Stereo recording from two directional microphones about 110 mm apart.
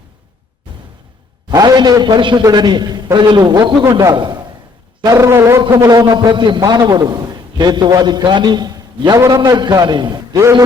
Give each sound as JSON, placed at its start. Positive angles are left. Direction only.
{"t": 1.5, "sound": "a man's voice", "side_deg": -40}
{"t": 5.0, "sound": "a man's voice", "side_deg": -25}